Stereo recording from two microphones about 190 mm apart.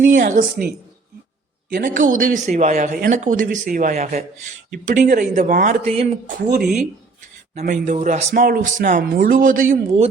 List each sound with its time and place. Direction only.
0.0 s speech: 45° right (ahead or behind)
1.7 s speech: 45° right (ahead or behind)
6.6 s speech: centre (ahead or behind)
7.6 s speech: 40° right (ahead or behind)